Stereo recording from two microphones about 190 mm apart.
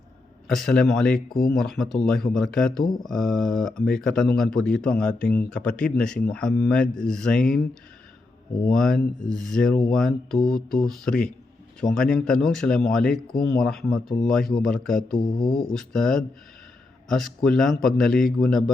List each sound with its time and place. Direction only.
0.4 s speech: centre (ahead or behind)
8.7 s speech: 5° left (ahead or behind)
15.2 s speech: 50° left (ahead or behind)
15.7 s speech: centre (ahead or behind)